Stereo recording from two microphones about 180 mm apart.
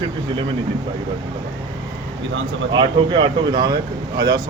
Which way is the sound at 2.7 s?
25° right (ahead or behind).